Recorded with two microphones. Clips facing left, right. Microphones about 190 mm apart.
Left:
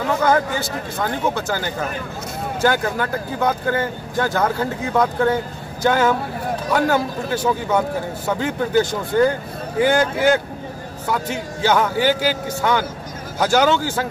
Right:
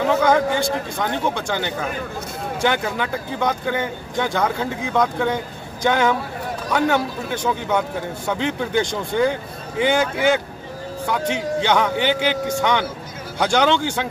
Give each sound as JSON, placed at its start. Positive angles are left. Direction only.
{"t": 0.2, "sound": "speech", "side_deg": 5}